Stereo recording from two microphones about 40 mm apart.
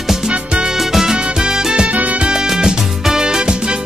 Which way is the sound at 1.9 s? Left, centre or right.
Right.